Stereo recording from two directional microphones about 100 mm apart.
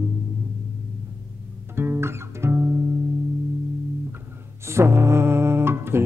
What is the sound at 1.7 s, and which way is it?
Music, 20° right (ahead or behind).